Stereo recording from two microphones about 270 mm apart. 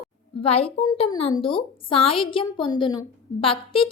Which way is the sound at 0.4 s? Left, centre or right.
Left.